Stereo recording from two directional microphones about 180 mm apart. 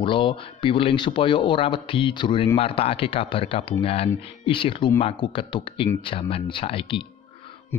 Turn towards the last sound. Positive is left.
turn(degrees=30)  # may be behind; listen again after turning